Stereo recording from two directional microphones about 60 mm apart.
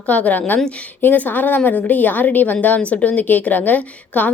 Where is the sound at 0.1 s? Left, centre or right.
Left.